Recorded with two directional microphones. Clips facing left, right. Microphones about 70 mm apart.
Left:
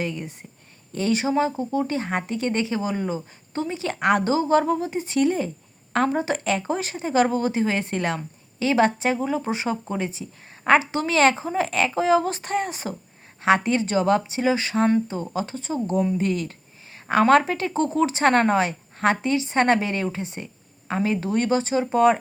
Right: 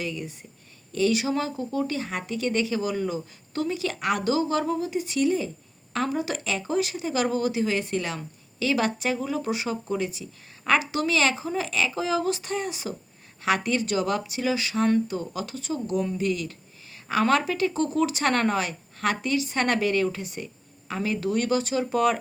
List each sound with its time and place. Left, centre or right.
0.0 s speech: left